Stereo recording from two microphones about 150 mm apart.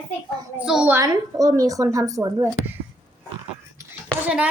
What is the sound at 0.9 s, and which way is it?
Speech, 25° right (ahead or behind).